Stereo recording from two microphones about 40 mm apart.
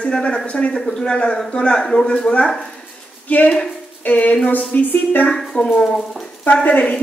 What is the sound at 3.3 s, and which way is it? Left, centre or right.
A woman's voice, left.